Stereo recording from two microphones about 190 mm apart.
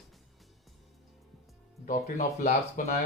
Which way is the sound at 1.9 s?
45° left (ahead or behind).